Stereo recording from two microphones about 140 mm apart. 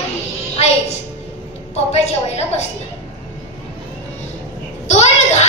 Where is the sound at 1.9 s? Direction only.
50° left (ahead or behind).